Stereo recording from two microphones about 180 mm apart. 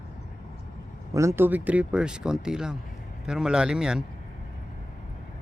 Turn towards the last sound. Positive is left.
turn(degrees=-5)  # may be behind; listen again after turning